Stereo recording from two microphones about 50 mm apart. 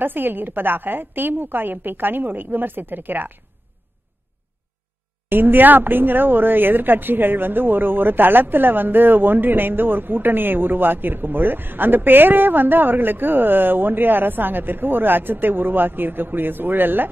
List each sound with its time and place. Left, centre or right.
0.0 s speech: right
5.3 s speech: right